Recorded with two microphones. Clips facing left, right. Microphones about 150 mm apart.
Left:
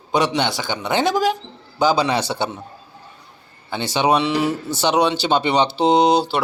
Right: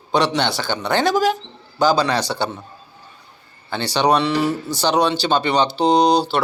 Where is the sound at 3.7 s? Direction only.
10° left (ahead or behind).